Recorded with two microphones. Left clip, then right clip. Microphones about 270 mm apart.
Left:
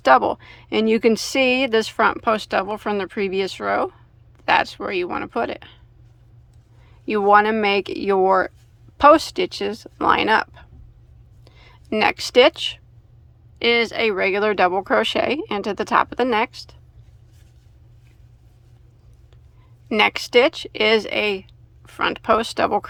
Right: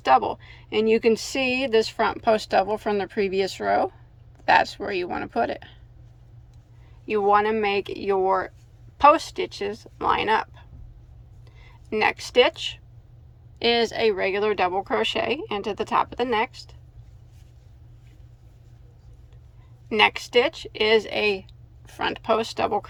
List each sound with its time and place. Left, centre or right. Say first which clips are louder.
0.0 s speech: left 4 dB; centre
7.0 s speech: left 5 dB; centre
13.6 s speech: left 3 dB; centre
19.9 s speech: left 3 dB; centre